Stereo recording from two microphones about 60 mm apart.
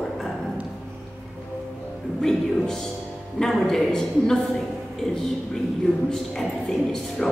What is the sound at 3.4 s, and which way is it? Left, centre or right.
Speech, centre.